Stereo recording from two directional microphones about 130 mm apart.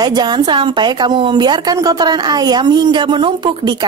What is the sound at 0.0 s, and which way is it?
A woman's voice, 35° right (ahead or behind).